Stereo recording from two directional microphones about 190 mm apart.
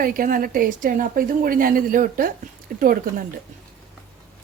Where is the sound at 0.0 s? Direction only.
50° right (ahead or behind).